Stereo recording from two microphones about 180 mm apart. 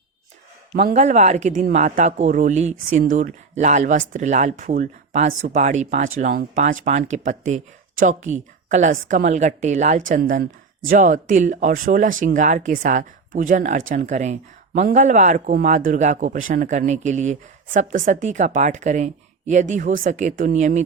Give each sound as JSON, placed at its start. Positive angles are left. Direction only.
{"t": 0.9, "sound": "speech", "side_deg": -40}